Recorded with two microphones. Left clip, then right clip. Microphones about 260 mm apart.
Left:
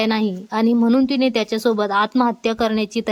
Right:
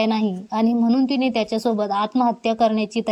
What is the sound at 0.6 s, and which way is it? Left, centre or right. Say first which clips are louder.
Speech: left 3 dB; left.